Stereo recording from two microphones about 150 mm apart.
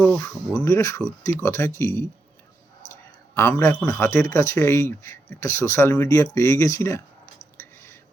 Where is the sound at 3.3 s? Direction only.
15° left (ahead or behind).